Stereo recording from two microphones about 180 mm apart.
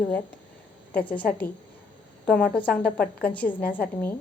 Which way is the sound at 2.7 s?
5° left (ahead or behind).